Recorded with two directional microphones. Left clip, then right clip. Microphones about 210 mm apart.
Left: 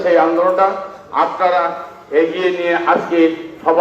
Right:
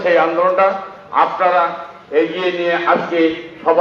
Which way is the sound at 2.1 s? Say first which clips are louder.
Left 1 dB; 30° right (ahead or behind).